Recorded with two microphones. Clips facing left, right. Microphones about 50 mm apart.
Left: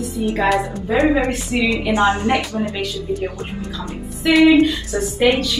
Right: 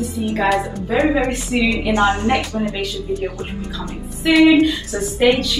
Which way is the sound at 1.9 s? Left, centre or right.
Centre.